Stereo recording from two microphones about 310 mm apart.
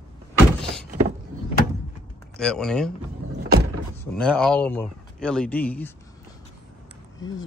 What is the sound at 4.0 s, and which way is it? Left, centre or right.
Speech, centre.